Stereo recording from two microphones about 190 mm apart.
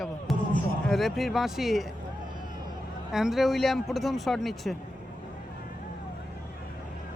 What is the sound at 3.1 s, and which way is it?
Speech, centre (ahead or behind).